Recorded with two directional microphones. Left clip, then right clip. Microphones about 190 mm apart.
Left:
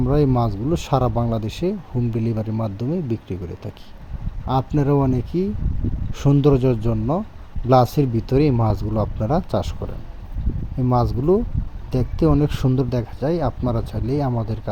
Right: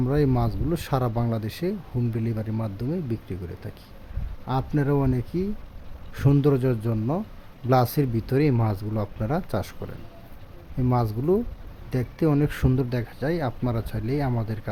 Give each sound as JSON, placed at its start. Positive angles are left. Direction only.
{"t": 0.0, "sound": "speech", "side_deg": 10}